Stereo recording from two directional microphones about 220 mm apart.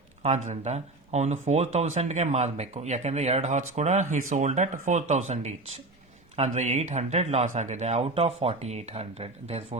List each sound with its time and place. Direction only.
0.2 s speech: 30° right (ahead or behind)